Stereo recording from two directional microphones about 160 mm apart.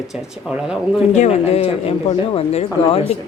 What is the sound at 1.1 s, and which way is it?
Speech, 45° left (ahead or behind).